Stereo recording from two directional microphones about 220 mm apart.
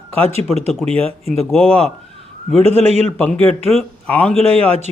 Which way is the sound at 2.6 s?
30° right (ahead or behind).